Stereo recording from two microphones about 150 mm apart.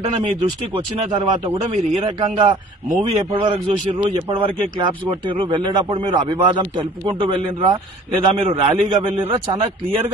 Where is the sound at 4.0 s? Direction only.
30° right (ahead or behind).